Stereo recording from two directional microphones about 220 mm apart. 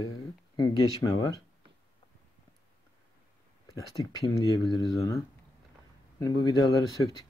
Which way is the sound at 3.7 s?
15° left (ahead or behind).